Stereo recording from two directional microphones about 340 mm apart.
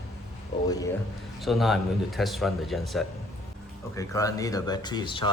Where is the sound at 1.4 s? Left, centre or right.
Centre.